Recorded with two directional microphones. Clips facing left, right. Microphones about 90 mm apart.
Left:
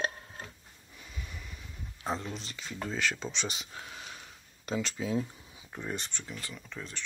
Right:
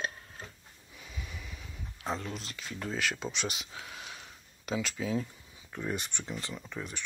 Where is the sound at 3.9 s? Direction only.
Centre (ahead or behind).